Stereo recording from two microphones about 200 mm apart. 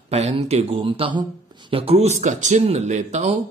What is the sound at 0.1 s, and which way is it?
Speech, 30° right (ahead or behind).